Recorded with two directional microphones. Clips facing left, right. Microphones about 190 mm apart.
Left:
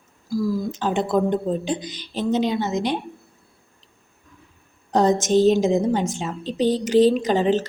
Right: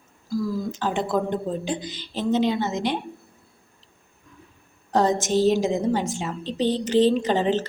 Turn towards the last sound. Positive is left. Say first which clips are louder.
# left 2 dB
turn(degrees=15)  # may be behind; listen again after turning